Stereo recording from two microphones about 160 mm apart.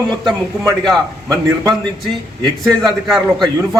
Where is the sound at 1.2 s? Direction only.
20° right (ahead or behind).